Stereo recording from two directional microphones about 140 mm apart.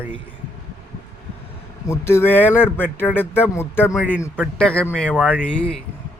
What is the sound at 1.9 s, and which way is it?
Speech, 15° left (ahead or behind).